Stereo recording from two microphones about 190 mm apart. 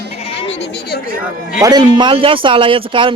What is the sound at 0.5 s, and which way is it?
Speech, 65° left (ahead or behind).